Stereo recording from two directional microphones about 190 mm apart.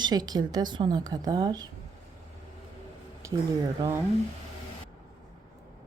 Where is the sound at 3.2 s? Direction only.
15° right (ahead or behind).